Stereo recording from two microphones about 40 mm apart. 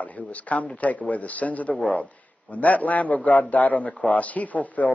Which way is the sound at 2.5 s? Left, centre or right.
Left.